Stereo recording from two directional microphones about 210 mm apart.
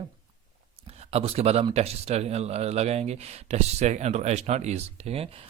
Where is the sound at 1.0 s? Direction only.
30° right (ahead or behind).